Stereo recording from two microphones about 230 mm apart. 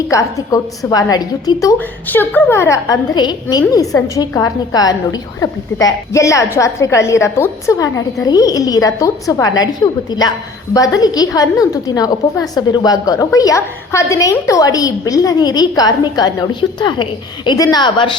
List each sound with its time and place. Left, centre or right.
0.1 s a woman's voice: centre